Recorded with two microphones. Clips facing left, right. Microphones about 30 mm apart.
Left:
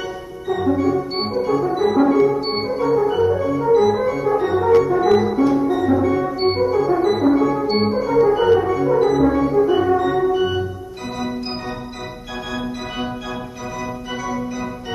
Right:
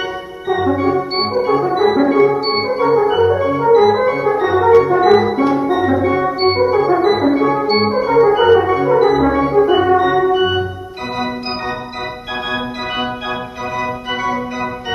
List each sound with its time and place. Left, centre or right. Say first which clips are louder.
0.5 s organ: right 3 dB; right
5.2 s music: right 2 dB; right